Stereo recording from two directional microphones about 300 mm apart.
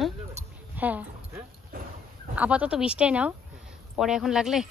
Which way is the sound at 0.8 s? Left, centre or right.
Centre.